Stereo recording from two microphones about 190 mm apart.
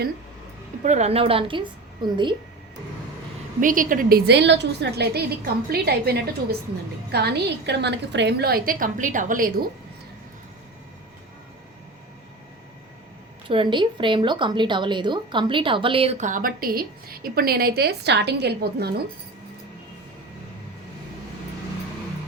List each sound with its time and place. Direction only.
0.9 s a woman's voice: 35° right (ahead or behind)
3.6 s a woman's voice: 45° right (ahead or behind)
13.5 s a woman's voice: 25° right (ahead or behind); by 19.0 s 60° right (ahead or behind)